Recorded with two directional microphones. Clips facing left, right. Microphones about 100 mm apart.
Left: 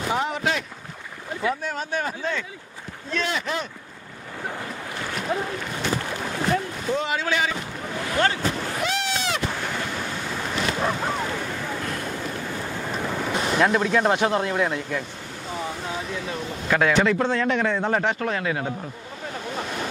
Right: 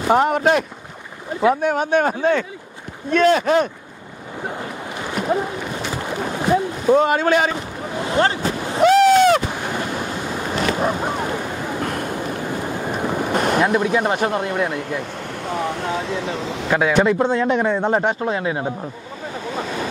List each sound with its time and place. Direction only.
0.1 s a man's voice: 55° right (ahead or behind)
4.4 s boat: 20° right (ahead or behind)
6.9 s speech: 50° right (ahead or behind)
7.9 s a man's voice: 25° right (ahead or behind)
8.4 s speech: 15° right (ahead or behind)
8.8 s a sound: 50° right (ahead or behind)
9.5 s waves: 15° right (ahead or behind)
10.8 s a sound: 15° right (ahead or behind)
11.8 s a sound: 55° right (ahead or behind)
12.4 s boat: 15° right (ahead or behind)
13.3 s boat: 50° right (ahead or behind)
13.6 s speech: 10° right (ahead or behind)
14.4 s speech: 60° right (ahead or behind); by 16.6 s 90° right
16.6 s a man's voice: 20° right (ahead or behind)